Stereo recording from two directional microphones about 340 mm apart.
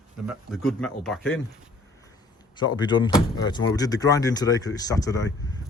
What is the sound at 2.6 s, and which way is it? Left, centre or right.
Speech, centre.